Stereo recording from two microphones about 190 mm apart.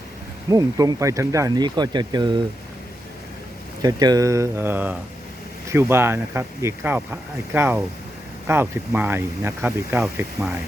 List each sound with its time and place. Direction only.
0.5 s speech: 20° right (ahead or behind)
3.8 s speech: 20° right (ahead or behind)